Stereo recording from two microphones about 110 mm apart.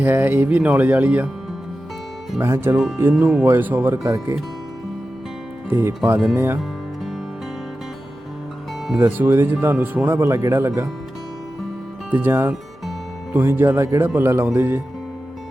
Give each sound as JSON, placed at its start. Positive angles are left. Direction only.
{"t": 0.0, "sound": "speech", "side_deg": -20}
{"t": 2.4, "sound": "speech", "side_deg": -25}
{"t": 4.0, "sound": "speech", "side_deg": -30}
{"t": 6.3, "sound": "speech", "side_deg": -20}
{"t": 9.0, "sound": "speech", "side_deg": -20}
{"t": 12.1, "sound": "speech", "side_deg": -20}